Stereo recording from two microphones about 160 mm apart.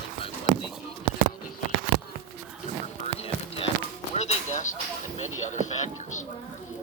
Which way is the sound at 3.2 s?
40° left (ahead or behind).